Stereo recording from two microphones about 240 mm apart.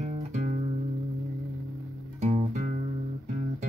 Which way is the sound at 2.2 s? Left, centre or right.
Right.